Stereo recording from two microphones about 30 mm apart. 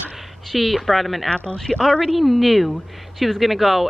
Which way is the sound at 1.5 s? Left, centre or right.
Centre.